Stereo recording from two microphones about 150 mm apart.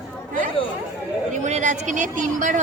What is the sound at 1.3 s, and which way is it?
Speech, 55° right (ahead or behind).